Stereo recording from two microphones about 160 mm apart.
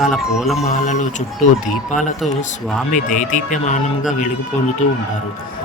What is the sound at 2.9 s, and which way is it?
Speech, 55° left (ahead or behind).